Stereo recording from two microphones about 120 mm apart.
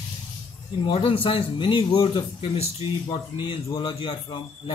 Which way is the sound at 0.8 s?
50° left (ahead or behind).